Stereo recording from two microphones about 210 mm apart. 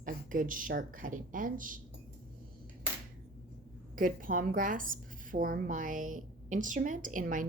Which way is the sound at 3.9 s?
40° right (ahead or behind).